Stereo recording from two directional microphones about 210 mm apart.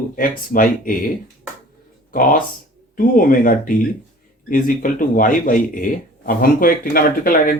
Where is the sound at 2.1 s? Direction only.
40° left (ahead or behind).